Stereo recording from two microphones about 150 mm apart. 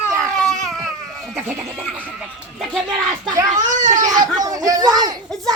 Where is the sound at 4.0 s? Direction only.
25° right (ahead or behind).